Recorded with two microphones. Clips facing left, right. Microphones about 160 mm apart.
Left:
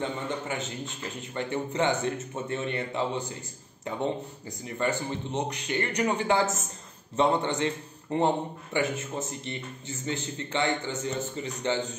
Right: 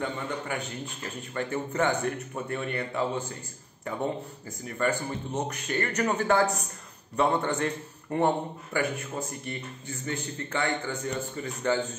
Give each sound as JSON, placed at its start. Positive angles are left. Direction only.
{"t": 0.0, "sound": "a man's voice", "side_deg": 25}
{"t": 4.6, "sound": "a man's voice", "side_deg": 20}